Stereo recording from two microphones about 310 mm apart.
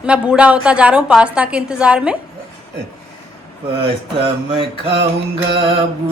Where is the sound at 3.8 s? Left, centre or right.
Centre.